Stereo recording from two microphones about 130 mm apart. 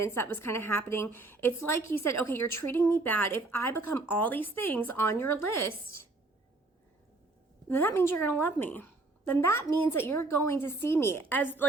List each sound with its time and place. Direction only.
0.0 s a woman's voice: 20° left (ahead or behind)
7.7 s a woman's voice: 15° left (ahead or behind)